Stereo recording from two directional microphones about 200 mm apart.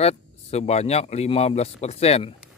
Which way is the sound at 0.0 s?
30° left (ahead or behind).